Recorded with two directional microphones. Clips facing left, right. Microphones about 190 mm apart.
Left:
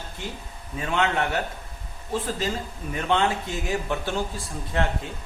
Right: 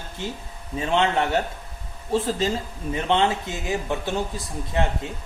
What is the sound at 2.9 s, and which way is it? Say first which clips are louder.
Speech: right 2 dB; 25° right (ahead or behind).